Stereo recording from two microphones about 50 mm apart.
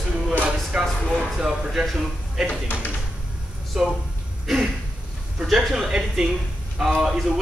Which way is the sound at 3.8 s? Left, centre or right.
Centre.